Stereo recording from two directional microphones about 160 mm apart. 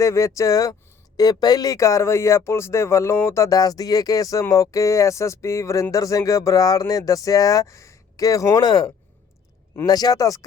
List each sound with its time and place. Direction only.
0.0 s speech: 20° left (ahead or behind)